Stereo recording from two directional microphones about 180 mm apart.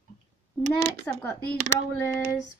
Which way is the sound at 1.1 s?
10° left (ahead or behind).